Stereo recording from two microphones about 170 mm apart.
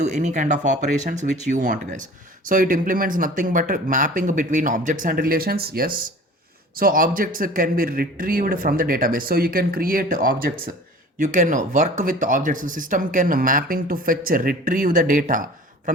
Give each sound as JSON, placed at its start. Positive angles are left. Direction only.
{"t": 0.0, "sound": "speech", "side_deg": -45}